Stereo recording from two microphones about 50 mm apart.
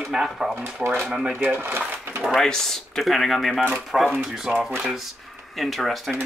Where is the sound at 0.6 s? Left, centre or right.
Right.